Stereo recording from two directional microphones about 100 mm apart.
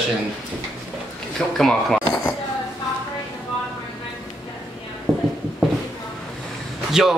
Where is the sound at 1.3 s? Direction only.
5° left (ahead or behind).